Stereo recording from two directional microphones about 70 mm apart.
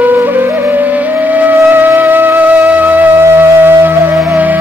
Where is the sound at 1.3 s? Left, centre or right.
Right.